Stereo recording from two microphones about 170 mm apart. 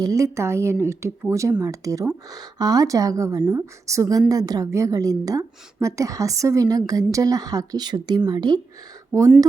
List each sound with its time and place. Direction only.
0.0 s speech: 20° right (ahead or behind)